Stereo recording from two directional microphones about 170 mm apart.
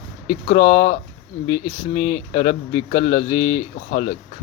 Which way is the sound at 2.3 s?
35° left (ahead or behind).